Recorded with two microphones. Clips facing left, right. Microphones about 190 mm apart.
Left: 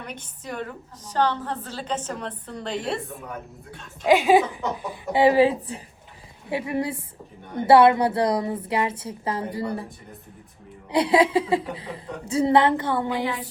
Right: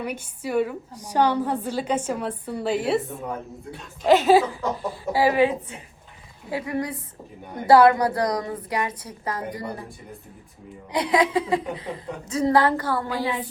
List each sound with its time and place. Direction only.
0.0 s a woman's voice: 10° right (ahead or behind)
4.0 s a woman's voice: 10° left (ahead or behind); by 9.8 s 30° left (ahead or behind)
10.9 s a woman's voice: 30° left (ahead or behind)